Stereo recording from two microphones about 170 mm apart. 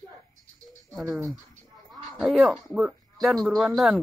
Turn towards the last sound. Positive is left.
turn(degrees=0)  # may be behind; listen again after turning